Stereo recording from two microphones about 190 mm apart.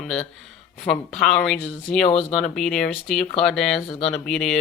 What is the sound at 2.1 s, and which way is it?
Speech, 35° left (ahead or behind).